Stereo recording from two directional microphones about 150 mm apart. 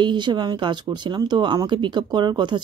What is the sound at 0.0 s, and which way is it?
Speech, 30° right (ahead or behind).